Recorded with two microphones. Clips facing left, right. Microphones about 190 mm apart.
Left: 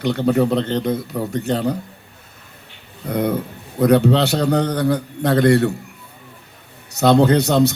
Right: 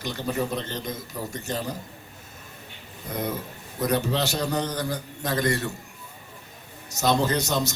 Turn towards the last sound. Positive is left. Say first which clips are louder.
# left 11 dB
turn(degrees=60)  # may be behind; listen again after turning